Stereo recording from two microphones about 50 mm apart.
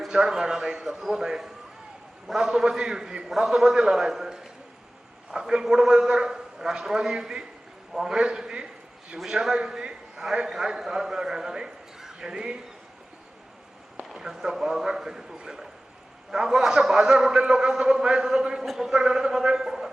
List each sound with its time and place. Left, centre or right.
0.1 s a man's voice: centre
14.1 s a man's voice: centre